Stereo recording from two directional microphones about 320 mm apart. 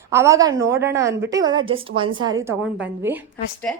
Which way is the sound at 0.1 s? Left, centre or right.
Centre.